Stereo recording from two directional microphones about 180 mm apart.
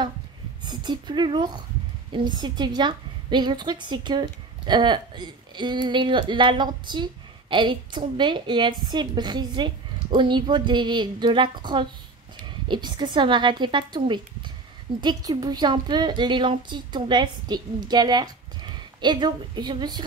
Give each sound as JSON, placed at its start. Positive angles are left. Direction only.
{"t": 0.7, "sound": "a woman's voice", "side_deg": -25}